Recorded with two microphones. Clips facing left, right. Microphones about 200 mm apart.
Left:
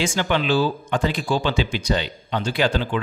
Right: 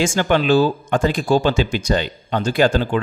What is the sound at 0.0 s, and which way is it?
Speech, 45° right (ahead or behind).